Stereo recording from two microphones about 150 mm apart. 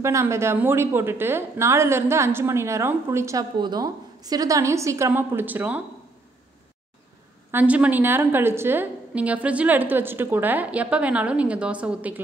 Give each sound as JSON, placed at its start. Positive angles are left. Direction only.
{"t": 0.0, "sound": "a woman's voice", "side_deg": -20}
{"t": 7.5, "sound": "a woman's voice", "side_deg": -10}